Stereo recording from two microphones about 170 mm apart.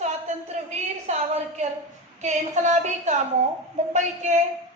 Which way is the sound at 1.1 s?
40° right (ahead or behind).